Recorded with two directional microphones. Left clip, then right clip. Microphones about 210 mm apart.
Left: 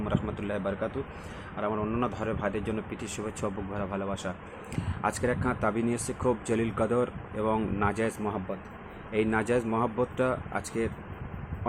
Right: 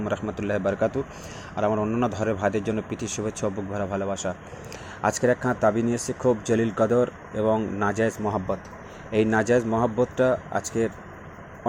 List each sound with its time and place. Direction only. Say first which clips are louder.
0.0 s a man's voice: right 5 dB; 15° right (ahead or behind)